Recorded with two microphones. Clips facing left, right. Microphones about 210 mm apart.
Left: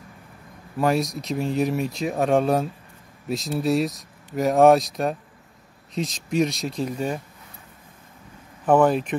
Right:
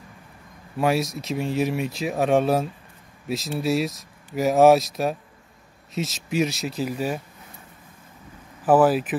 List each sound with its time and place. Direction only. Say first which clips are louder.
0.7 s speech: even; centre (ahead or behind)
8.6 s speech: even; 5° right (ahead or behind)